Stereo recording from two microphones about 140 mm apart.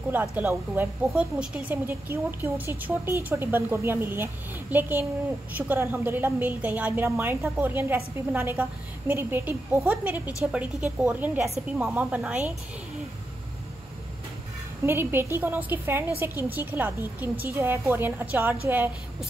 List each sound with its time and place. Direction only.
0.1 s a woman's voice: 15° right (ahead or behind)
14.9 s a woman's voice: 15° right (ahead or behind)